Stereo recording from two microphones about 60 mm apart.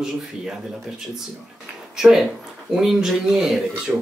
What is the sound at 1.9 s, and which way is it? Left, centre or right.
Speech, centre.